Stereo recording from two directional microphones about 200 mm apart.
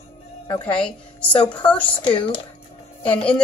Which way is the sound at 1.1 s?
5° left (ahead or behind).